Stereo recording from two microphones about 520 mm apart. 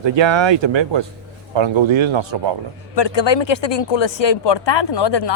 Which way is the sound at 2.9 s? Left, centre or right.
Left.